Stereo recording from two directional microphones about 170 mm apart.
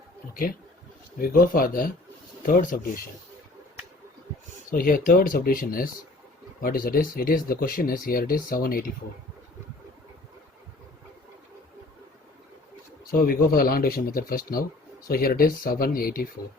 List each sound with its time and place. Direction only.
1.2 s speech: 60° left (ahead or behind)
4.7 s speech: 55° left (ahead or behind)
13.1 s speech: 60° left (ahead or behind)